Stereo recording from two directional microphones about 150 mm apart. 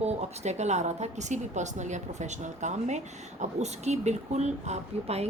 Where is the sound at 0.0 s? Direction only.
50° right (ahead or behind).